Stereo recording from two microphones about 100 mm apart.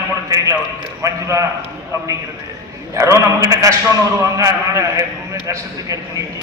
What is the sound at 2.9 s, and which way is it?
A man's voice, 30° right (ahead or behind).